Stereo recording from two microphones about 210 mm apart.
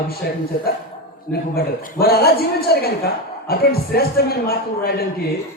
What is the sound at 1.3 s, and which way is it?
A man's voice, 45° left (ahead or behind).